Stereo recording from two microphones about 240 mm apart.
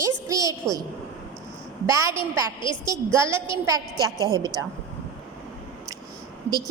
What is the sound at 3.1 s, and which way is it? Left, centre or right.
Speech, centre.